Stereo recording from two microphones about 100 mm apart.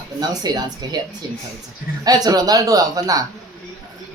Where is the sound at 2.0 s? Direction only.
40° right (ahead or behind).